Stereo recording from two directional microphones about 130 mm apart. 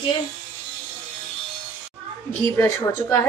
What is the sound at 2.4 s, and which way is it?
Speech, 25° left (ahead or behind).